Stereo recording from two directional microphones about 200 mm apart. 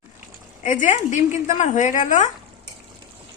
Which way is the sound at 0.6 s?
40° left (ahead or behind).